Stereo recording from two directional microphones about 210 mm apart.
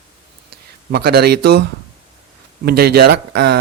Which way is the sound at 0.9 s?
45° right (ahead or behind).